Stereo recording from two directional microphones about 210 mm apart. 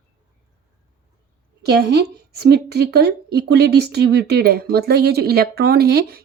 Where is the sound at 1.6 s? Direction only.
50° right (ahead or behind).